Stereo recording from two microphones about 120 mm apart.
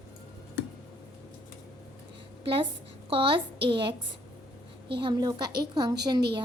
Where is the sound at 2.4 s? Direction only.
45° right (ahead or behind).